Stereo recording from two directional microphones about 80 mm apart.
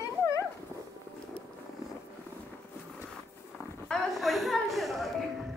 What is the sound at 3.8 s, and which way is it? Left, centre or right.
A woman's voice, centre.